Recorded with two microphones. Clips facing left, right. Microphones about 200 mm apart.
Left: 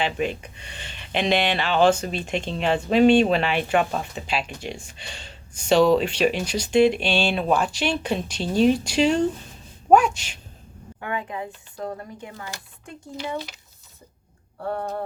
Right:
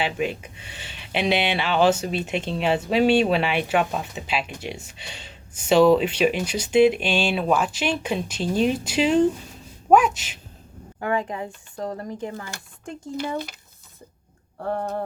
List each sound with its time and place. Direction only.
0.0 s speech: 5° right (ahead or behind)
11.0 s speech: 40° right (ahead or behind)